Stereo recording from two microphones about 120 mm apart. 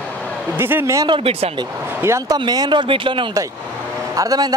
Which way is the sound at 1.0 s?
50° right (ahead or behind).